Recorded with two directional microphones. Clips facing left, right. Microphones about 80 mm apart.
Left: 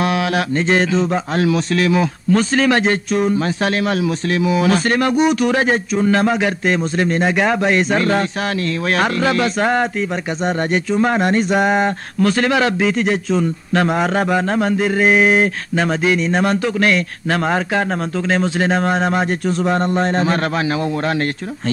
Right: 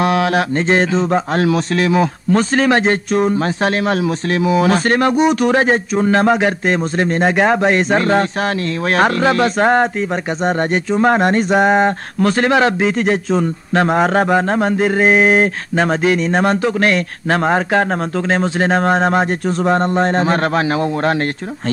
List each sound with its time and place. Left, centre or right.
0.0 s speech: right
1.8 s speech: right
5.1 s speech: right
11.1 s speech: right
11.5 s speech: right
17.6 s speech: right
18.3 s speech: right